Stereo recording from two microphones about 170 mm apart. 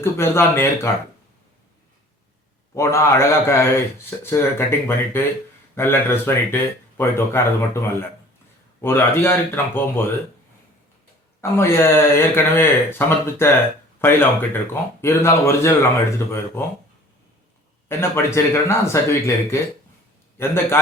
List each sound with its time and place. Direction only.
0.0 s speech: 15° left (ahead or behind)
2.7 s speech: 15° left (ahead or behind)
8.8 s speech: 15° left (ahead or behind)
11.3 s speech: 15° left (ahead or behind)
17.8 s speech: 15° left (ahead or behind)